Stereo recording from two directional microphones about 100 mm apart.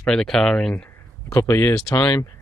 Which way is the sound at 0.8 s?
25° left (ahead or behind).